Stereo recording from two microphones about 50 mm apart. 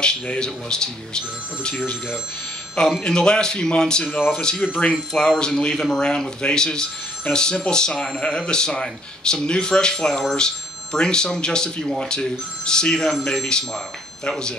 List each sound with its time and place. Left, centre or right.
0.0 s speech: centre
3.0 s speech: centre